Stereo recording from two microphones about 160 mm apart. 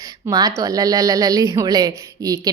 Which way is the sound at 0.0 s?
20° right (ahead or behind).